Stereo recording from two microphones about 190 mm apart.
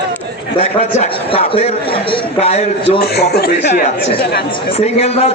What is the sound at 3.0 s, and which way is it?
Speech, 55° left (ahead or behind).